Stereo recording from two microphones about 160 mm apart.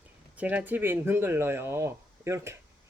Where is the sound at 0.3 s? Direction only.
10° right (ahead or behind).